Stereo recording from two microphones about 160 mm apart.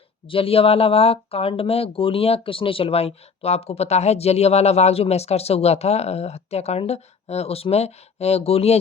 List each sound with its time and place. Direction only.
0.3 s speech: 35° left (ahead or behind)